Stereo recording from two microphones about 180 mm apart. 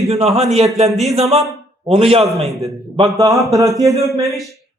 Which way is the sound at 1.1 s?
35° right (ahead or behind).